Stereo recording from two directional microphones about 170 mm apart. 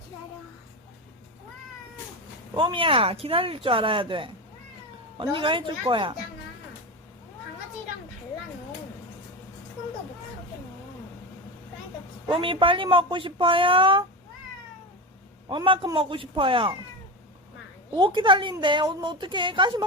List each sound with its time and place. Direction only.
2.6 s a woman's voice: 30° right (ahead or behind)
12.3 s speech: 30° right (ahead or behind)
15.4 s speech: 30° right (ahead or behind)
17.9 s a woman's voice: 25° right (ahead or behind)